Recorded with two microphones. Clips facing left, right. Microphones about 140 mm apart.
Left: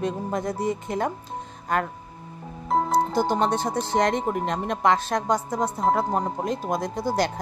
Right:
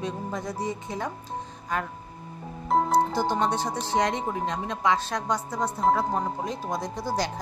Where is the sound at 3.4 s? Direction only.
50° left (ahead or behind).